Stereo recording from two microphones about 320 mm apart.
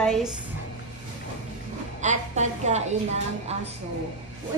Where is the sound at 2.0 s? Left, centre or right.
Right.